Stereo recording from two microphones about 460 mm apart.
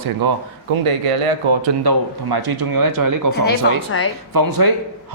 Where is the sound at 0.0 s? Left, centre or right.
Right.